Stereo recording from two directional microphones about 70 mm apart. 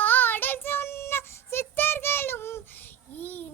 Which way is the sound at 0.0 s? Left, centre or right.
Left.